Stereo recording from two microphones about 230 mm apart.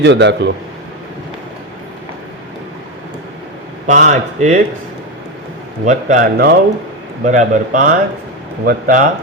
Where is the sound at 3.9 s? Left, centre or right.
Right.